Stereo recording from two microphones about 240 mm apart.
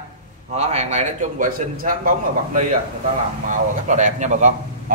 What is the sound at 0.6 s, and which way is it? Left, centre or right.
Speech, right.